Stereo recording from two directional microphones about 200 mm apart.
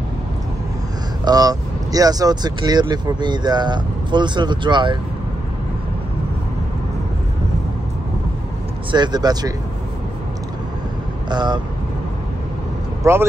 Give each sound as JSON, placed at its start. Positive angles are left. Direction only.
{"t": 1.2, "sound": "speech", "side_deg": -20}
{"t": 8.9, "sound": "speech", "side_deg": -20}
{"t": 11.2, "sound": "speech", "side_deg": -20}
{"t": 13.0, "sound": "speech", "side_deg": -15}